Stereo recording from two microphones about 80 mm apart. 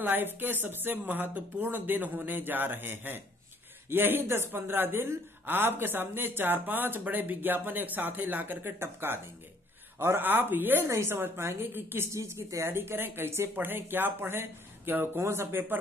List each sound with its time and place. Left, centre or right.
0.0 s a woman's voice: right